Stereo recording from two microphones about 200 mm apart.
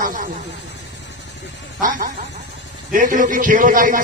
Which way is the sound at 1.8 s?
40° right (ahead or behind).